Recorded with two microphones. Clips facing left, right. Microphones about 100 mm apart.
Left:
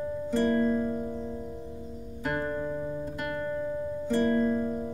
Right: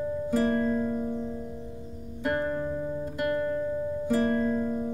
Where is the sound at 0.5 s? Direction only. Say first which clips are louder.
Even; 15° right (ahead or behind).